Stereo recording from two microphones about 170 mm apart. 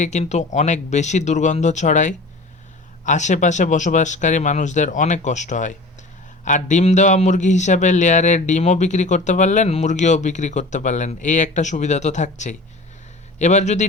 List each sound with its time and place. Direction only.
0.0 s a man's voice: 45° left (ahead or behind)